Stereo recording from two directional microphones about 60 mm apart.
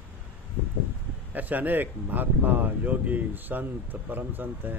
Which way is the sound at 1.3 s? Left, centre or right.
Right.